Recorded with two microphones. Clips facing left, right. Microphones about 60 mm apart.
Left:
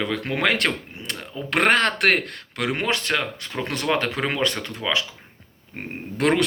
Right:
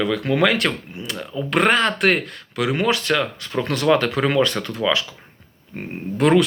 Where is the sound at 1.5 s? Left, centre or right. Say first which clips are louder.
Right 1 dB; left.